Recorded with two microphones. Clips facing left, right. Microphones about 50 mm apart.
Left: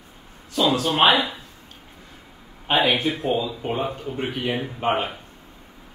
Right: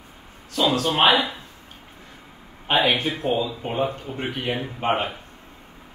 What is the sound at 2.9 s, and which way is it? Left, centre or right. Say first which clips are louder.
Speech: left 1 dB; centre.